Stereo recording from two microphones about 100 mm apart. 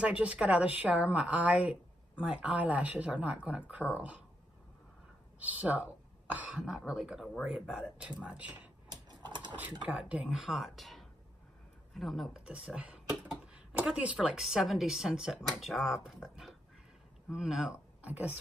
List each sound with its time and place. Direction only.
0.0 s a woman's voice: 15° right (ahead or behind)
5.4 s speech: 15° right (ahead or behind)
8.2 s a woman's voice: 15° right (ahead or behind)
9.3 s a sound: 50° right (ahead or behind)
9.6 s a woman's voice: 15° right (ahead or behind)
17.3 s speech: 5° right (ahead or behind)